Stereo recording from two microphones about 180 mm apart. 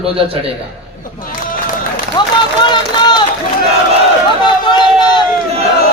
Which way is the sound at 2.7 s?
25° left (ahead or behind).